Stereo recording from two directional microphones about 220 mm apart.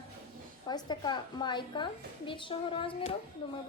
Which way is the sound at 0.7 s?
20° left (ahead or behind).